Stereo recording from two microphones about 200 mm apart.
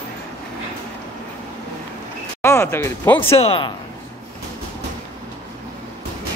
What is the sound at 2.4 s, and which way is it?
Speech, 15° left (ahead or behind).